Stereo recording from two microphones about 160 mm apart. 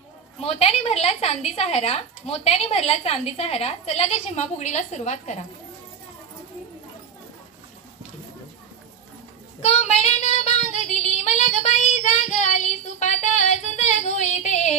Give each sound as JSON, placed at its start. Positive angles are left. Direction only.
{"t": 0.4, "sound": "a woman's voice", "side_deg": 40}
{"t": 9.6, "sound": "child singing", "side_deg": 40}